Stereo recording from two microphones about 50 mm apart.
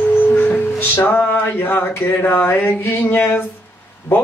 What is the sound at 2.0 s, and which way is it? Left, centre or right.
Speech, left.